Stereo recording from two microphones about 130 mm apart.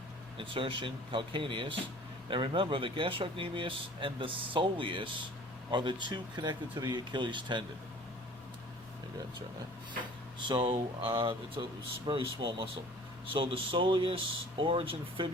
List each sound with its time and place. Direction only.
0.3 s speech: 40° right (ahead or behind)
10.4 s speech: 40° right (ahead or behind)